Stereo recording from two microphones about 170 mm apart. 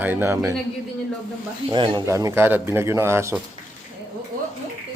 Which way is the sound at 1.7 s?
25° right (ahead or behind).